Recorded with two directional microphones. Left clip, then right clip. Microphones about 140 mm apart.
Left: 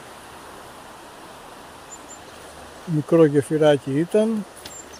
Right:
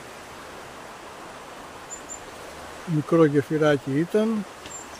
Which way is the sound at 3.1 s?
10° left (ahead or behind).